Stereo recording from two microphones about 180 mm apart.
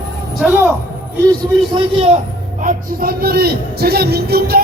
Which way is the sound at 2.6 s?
50° right (ahead or behind).